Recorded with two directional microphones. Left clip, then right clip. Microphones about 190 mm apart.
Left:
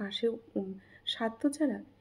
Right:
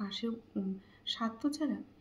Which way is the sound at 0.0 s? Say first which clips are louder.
Left 7 dB; 30° left (ahead or behind).